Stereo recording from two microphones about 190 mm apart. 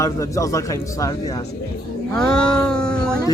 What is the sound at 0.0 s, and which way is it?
Speech, 15° left (ahead or behind).